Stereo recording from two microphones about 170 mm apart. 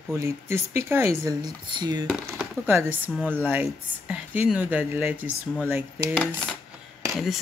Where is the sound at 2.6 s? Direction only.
10° right (ahead or behind).